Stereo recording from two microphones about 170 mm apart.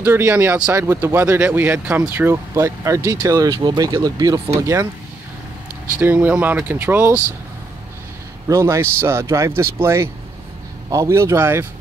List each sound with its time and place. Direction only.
0.0 s speech: 10° right (ahead or behind)
5.9 s speech: 10° right (ahead or behind)
8.5 s speech: 15° right (ahead or behind)